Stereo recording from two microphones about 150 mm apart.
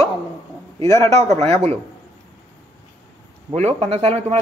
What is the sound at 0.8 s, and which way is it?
Speech, 20° left (ahead or behind).